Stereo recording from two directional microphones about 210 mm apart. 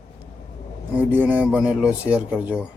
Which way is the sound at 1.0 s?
10° right (ahead or behind).